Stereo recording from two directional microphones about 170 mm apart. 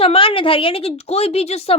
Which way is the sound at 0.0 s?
35° left (ahead or behind).